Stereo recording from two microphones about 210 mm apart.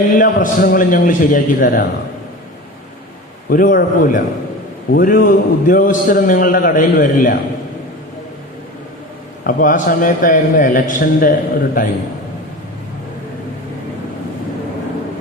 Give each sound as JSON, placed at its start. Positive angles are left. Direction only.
{"t": 0.2, "sound": "a man's voice", "side_deg": 40}
{"t": 3.5, "sound": "a man's voice", "side_deg": 40}
{"t": 9.4, "sound": "a man's voice", "side_deg": 40}